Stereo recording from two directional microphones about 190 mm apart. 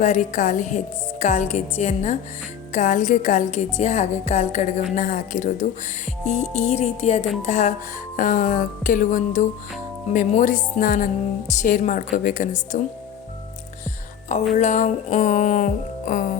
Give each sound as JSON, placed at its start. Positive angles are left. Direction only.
{"t": 0.0, "sound": "music", "side_deg": 40}
{"t": 4.9, "sound": "speech", "side_deg": 45}
{"t": 6.2, "sound": "music", "side_deg": 35}
{"t": 8.1, "sound": "speech", "side_deg": 45}
{"t": 14.5, "sound": "music", "side_deg": 40}